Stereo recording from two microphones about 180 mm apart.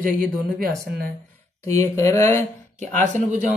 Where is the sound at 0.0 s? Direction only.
50° right (ahead or behind).